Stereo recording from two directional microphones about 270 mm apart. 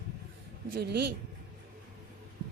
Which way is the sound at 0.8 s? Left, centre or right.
Right.